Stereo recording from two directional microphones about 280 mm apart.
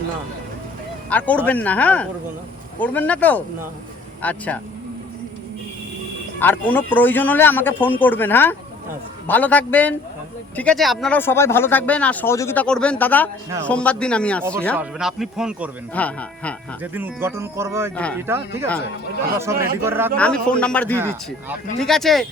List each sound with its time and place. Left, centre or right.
1.1 s speech: centre
6.4 s speech: centre
16.8 s speech: centre
17.9 s speech: centre
18.3 s speech: centre
20.1 s speech: centre
20.9 s speech: centre